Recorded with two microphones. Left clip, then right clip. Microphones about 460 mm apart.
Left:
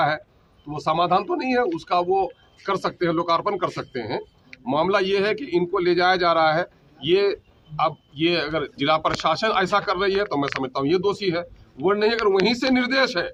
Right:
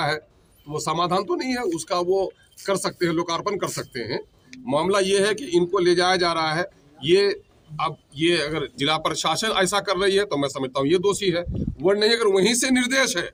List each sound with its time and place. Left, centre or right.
0.7 s speech: left